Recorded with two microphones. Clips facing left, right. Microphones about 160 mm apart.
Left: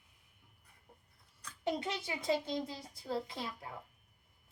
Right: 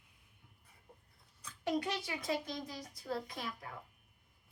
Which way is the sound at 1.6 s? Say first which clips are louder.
Right 1 dB; 25° left (ahead or behind).